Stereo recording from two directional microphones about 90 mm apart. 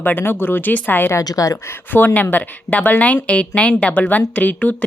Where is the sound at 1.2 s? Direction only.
40° left (ahead or behind).